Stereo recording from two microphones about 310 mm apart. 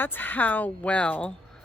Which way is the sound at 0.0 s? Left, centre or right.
Centre.